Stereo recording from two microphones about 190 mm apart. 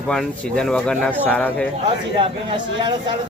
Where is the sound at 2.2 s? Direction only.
25° right (ahead or behind).